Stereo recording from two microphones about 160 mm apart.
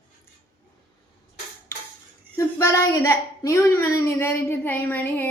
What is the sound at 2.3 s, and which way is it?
A woman's voice, 20° left (ahead or behind).